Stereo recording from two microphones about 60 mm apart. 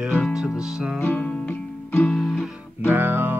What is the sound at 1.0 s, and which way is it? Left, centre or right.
Music, left.